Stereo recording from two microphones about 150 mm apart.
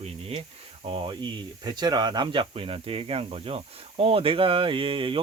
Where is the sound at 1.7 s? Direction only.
30° right (ahead or behind).